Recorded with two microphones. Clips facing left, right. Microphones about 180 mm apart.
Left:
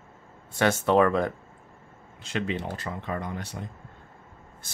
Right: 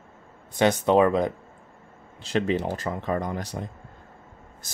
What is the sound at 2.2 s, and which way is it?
Speech, 40° right (ahead or behind).